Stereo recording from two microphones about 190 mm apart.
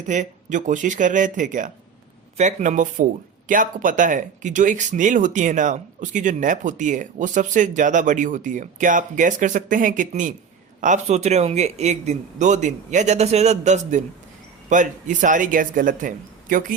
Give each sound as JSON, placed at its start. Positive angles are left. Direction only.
{"t": 0.1, "sound": "speech", "side_deg": -40}